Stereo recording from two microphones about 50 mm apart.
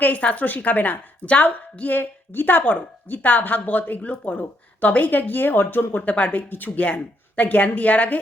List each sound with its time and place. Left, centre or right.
0.0 s a woman's voice: left
6.0 s a woman's voice: left